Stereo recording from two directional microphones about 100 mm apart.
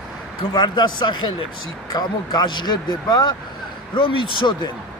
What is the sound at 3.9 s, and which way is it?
Speech, 60° left (ahead or behind).